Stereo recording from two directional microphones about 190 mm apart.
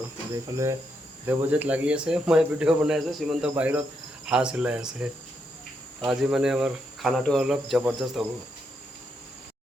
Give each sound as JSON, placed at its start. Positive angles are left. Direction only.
{"t": 0.4, "sound": "speech", "side_deg": -15}